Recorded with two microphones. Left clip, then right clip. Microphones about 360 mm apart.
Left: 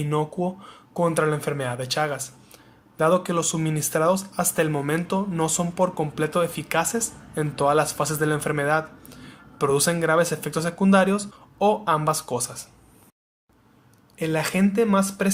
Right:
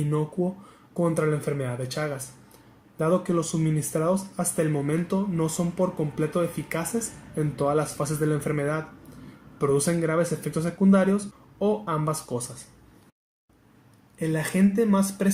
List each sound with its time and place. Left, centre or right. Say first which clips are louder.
0.9 s speech: left 3 dB; left
14.3 s speech: left 2 dB; left